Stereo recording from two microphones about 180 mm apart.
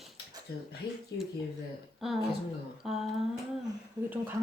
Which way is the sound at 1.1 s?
90° left.